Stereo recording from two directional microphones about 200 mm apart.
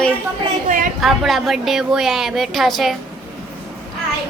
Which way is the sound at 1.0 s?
Centre (ahead or behind).